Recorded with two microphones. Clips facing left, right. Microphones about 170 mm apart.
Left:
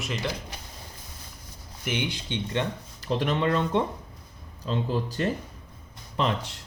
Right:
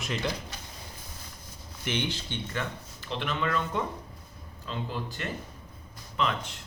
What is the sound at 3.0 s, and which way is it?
Speech, 40° left (ahead or behind).